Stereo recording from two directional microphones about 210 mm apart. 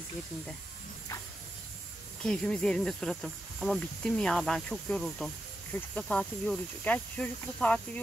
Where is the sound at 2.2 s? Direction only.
5° left (ahead or behind).